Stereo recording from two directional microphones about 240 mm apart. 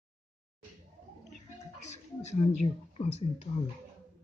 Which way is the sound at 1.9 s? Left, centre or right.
Left.